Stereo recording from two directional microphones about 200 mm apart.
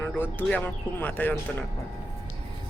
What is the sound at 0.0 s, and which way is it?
Speech, 10° left (ahead or behind).